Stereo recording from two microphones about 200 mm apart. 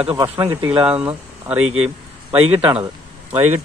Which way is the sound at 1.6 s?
90° right.